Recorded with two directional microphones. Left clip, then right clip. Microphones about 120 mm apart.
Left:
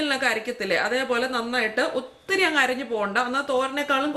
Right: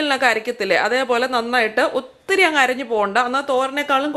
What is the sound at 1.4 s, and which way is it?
A woman's voice, 20° right (ahead or behind).